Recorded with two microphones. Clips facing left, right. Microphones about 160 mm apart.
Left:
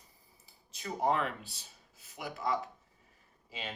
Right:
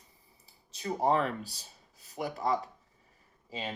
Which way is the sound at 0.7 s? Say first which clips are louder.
Right 3 dB; 30° right (ahead or behind).